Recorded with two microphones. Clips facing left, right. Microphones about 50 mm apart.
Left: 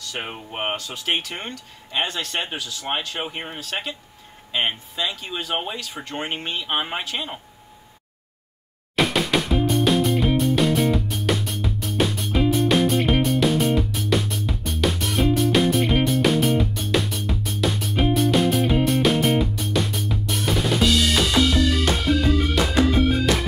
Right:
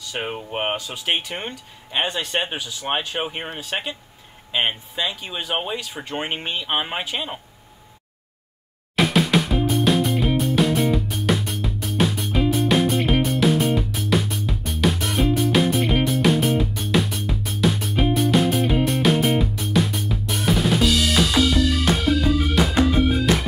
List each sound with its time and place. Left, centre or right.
0.0 s speech: centre
8.9 s music: centre